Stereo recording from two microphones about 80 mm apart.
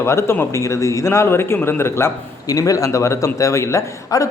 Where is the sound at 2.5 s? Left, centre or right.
Left.